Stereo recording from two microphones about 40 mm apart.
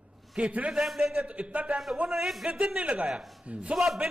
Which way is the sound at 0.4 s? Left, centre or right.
Right.